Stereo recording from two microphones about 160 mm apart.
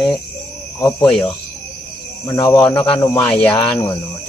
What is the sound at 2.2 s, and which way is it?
Speech, 20° left (ahead or behind).